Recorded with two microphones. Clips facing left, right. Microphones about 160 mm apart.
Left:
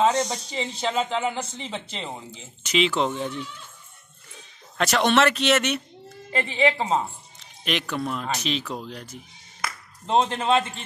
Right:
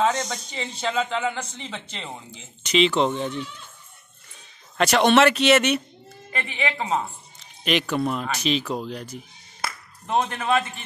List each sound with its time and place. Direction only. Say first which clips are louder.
0.0 s speech: left 2 dB; 30° left (ahead or behind)
2.0 s speech: left 2 dB; 5° left (ahead or behind)
4.7 s speech: right 3 dB; centre (ahead or behind)
6.3 s speech: left 6 dB; 35° left (ahead or behind)
7.6 s speech: right 4 dB; 5° right (ahead or behind)
10.0 s a man's voice: left 2 dB; 30° left (ahead or behind)